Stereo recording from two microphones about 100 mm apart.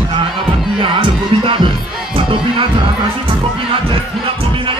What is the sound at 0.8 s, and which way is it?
Speech, 55° right (ahead or behind).